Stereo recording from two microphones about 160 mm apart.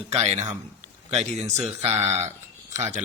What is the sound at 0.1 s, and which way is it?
A man's voice, 45° right (ahead or behind).